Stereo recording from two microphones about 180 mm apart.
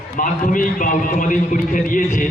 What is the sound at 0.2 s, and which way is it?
A man's voice, 45° left (ahead or behind).